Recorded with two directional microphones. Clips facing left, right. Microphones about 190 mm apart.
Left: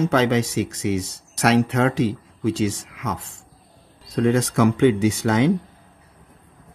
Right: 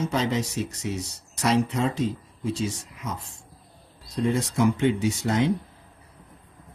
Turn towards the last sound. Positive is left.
turn(degrees=90)